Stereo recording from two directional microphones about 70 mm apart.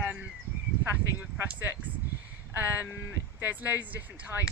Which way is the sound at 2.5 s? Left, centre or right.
Right.